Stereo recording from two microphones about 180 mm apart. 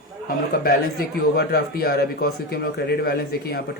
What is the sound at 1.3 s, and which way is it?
A man's voice, 60° left (ahead or behind).